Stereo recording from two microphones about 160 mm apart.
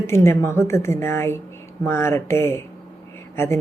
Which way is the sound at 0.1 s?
15° left (ahead or behind).